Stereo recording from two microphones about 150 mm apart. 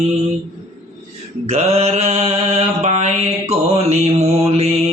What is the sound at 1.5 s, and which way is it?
Mantra, 45° right (ahead or behind).